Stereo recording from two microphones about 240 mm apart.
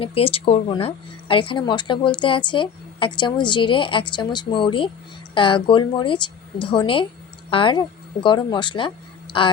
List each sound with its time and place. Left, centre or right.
0.0 s speech: left